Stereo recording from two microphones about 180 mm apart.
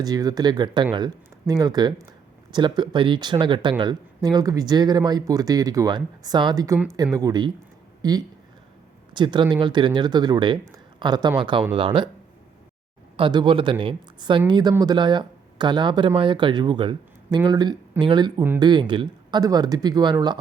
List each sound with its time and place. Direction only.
0.0 s speech: 20° right (ahead or behind)
13.1 s speech: 25° right (ahead or behind)